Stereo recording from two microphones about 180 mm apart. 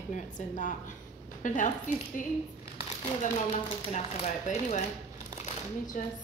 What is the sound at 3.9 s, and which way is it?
Speech, 40° left (ahead or behind).